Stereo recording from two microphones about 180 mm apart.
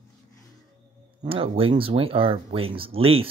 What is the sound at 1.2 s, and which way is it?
Speech, 30° right (ahead or behind).